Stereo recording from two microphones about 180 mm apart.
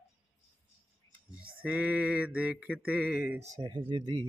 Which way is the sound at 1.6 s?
5° right (ahead or behind).